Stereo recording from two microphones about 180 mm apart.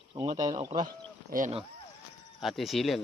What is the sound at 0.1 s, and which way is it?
Speech, 35° right (ahead or behind).